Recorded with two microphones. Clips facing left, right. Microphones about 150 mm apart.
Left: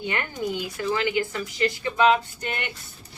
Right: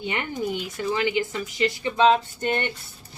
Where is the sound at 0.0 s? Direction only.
20° right (ahead or behind).